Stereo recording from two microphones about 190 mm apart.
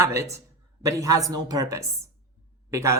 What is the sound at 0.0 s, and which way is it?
Speech, 15° right (ahead or behind).